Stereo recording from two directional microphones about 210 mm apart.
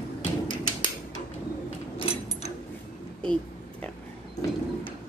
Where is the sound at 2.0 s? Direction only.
25° left (ahead or behind).